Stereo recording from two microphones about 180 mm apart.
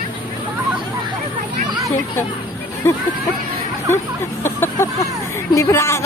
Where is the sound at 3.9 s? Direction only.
15° left (ahead or behind).